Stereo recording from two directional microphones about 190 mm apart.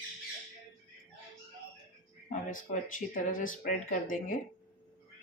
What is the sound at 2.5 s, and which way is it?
Speech, 45° left (ahead or behind).